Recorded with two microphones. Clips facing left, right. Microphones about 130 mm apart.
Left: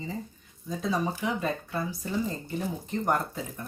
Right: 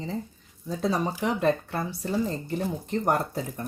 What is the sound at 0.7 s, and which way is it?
Speech, 70° right (ahead or behind).